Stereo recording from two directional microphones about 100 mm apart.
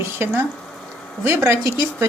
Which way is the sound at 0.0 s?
25° right (ahead or behind).